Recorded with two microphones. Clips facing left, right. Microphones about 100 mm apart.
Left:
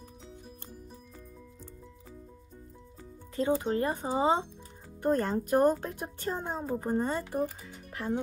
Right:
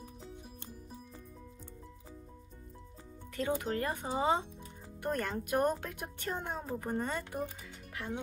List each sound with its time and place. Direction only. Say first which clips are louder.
3.3 s speech: left 6 dB; 20° left (ahead or behind)
7.9 s music: left 7 dB; 50° left (ahead or behind)